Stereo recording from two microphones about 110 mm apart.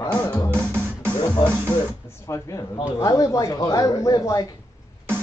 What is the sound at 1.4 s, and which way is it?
Speech, 45° left (ahead or behind).